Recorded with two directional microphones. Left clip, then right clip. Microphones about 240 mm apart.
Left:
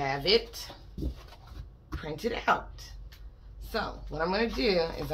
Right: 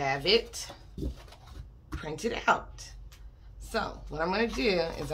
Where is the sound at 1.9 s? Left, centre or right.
Centre.